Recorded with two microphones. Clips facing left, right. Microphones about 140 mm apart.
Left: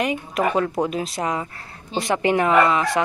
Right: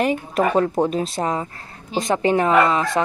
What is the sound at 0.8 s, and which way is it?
Speech, 25° right (ahead or behind).